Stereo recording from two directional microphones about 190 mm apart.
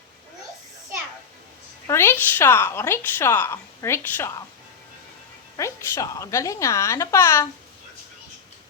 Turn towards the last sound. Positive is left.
turn(degrees=15)  # may be behind; listen again after turning